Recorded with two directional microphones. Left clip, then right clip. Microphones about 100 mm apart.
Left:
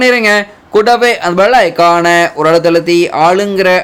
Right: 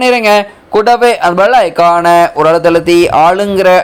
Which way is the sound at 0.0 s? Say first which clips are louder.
Right 1 dB; 30° right (ahead or behind).